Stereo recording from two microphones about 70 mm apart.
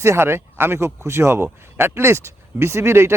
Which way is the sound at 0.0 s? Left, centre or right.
Right.